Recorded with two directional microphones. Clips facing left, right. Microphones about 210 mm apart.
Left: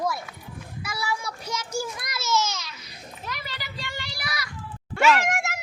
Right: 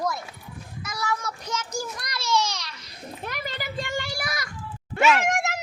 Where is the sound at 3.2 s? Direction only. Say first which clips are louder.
Right 4 dB; 50° right (ahead or behind).